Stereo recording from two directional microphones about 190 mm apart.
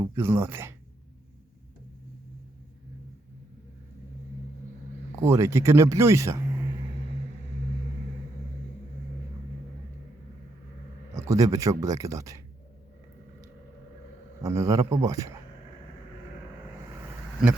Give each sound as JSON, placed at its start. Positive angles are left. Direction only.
{"t": 0.0, "sound": "speech", "side_deg": -15}
{"t": 5.2, "sound": "speech", "side_deg": -15}
{"t": 11.1, "sound": "speech", "side_deg": -15}
{"t": 14.4, "sound": "speech", "side_deg": -15}